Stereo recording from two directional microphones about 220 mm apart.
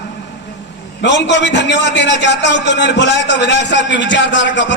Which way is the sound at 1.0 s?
55° left (ahead or behind).